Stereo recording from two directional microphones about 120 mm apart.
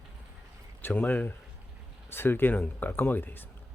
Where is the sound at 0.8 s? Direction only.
20° left (ahead or behind).